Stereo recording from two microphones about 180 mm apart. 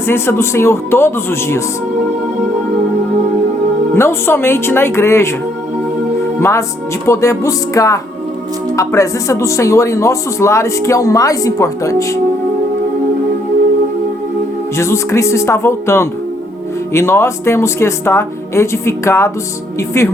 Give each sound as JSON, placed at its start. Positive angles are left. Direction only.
{"t": 0.1, "sound": "speech", "side_deg": 15}
{"t": 3.9, "sound": "speech", "side_deg": 15}
{"t": 6.4, "sound": "speech", "side_deg": 15}
{"t": 14.8, "sound": "speech", "side_deg": 15}